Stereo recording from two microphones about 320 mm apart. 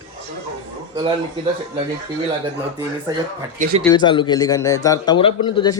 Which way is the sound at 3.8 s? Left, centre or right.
Centre.